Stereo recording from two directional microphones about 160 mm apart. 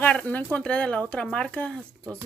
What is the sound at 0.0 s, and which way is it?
Speech, 10° left (ahead or behind).